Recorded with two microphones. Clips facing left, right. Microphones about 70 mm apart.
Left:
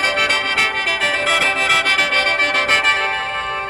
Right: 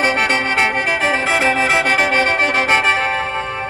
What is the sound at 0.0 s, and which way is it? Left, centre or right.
Music, right.